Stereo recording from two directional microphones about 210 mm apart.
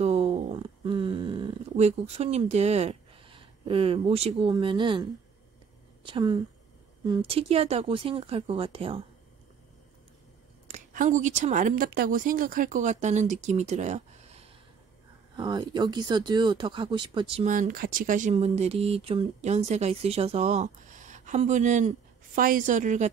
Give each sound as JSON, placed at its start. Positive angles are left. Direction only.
{"t": 0.0, "sound": "a sound", "side_deg": -30}
{"t": 6.0, "sound": "speech", "side_deg": -25}
{"t": 10.7, "sound": "speech", "side_deg": -35}
{"t": 15.3, "sound": "speech", "side_deg": -20}
{"t": 17.5, "sound": "speech", "side_deg": -40}